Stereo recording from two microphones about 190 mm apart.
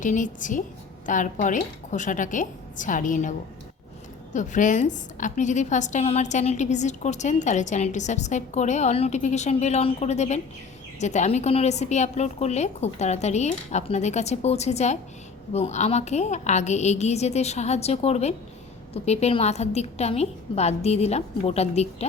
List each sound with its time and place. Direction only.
0.0 s a woman's voice: 40° left (ahead or behind)